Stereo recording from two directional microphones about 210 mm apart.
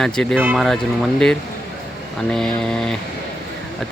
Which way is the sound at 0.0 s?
5° left (ahead or behind).